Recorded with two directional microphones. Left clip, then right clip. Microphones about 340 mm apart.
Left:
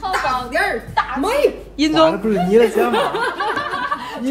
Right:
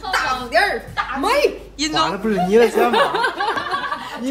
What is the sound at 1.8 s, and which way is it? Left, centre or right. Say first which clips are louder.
A man's voice: left 5 dB; centre.